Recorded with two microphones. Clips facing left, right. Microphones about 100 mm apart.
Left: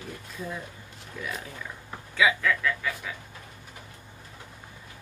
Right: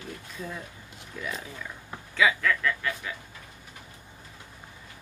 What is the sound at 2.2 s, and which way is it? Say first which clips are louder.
Speech: even; 5° left (ahead or behind).